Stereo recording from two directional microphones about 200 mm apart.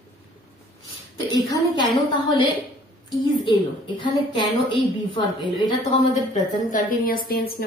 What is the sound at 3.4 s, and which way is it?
A woman's voice, 25° left (ahead or behind).